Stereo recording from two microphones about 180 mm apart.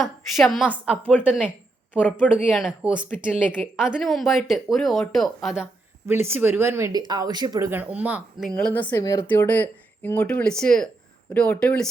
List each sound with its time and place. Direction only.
0.0 s speech: centre (ahead or behind)
1.9 s speech: 10° left (ahead or behind)
2.3 s speech: 5° right (ahead or behind)
6.1 s speech: 10° right (ahead or behind)
7.7 s speech: 10° right (ahead or behind)
8.4 s speech: 5° left (ahead or behind)